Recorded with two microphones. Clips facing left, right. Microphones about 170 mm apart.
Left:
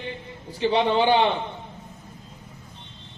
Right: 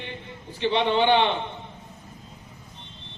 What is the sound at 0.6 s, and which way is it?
Speech, 35° left (ahead or behind).